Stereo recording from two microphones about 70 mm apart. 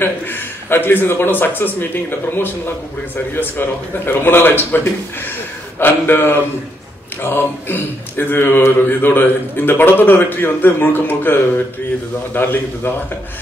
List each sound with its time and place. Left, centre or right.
0.0 s speech: left